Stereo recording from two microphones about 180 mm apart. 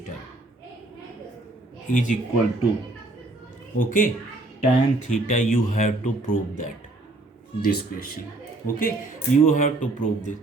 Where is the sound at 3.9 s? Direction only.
50° left (ahead or behind).